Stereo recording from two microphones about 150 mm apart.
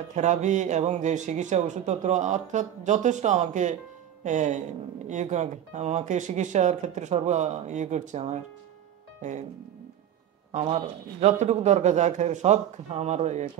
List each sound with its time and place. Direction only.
0.1 s speech: 50° right (ahead or behind)
10.5 s speech: 45° right (ahead or behind)